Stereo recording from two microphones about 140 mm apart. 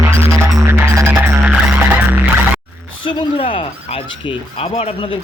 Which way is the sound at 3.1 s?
40° left (ahead or behind).